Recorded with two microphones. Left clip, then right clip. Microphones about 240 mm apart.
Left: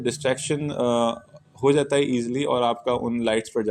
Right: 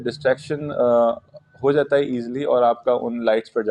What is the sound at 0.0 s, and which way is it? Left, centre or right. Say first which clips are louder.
Speech: right 4 dB; left.